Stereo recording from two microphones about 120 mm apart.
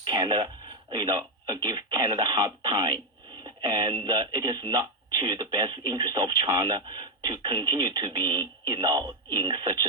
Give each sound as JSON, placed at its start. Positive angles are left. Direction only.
{"t": 0.0, "sound": "speech", "side_deg": -35}